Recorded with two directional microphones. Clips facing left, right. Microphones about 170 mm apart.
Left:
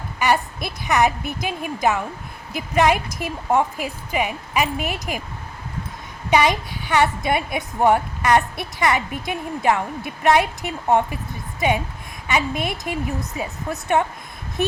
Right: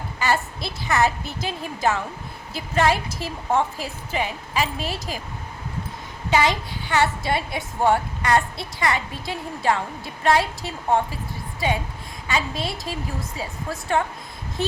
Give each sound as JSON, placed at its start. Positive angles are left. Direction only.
{"t": 0.2, "sound": "a woman's voice", "side_deg": 15}
{"t": 6.3, "sound": "a woman's voice", "side_deg": 20}
{"t": 12.3, "sound": "a woman's voice", "side_deg": 20}